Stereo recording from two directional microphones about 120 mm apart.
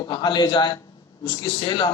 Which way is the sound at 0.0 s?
35° left (ahead or behind).